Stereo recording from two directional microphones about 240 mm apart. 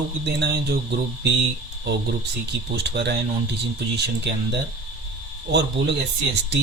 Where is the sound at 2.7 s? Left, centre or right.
Right.